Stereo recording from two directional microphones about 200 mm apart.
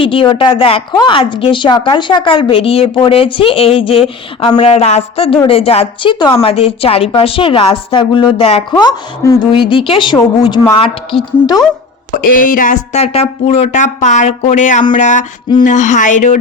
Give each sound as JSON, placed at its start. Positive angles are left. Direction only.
{"t": 0.0, "sound": "a woman's voice", "side_deg": 25}
{"t": 12.4, "sound": "speech", "side_deg": 45}